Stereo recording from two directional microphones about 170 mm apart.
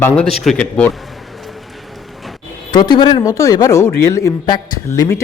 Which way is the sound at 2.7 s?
25° left (ahead or behind).